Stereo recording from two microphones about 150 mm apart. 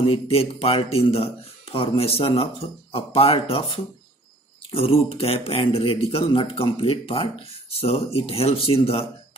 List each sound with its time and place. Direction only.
0.0 s speech: 40° left (ahead or behind)